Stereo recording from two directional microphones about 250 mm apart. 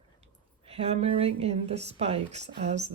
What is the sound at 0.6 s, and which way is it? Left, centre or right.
Speech, right.